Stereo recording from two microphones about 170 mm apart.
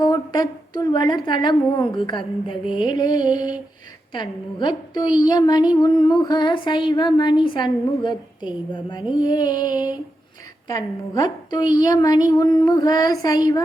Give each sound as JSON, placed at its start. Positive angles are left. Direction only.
{"t": 0.0, "sound": "a woman's voice", "side_deg": 25}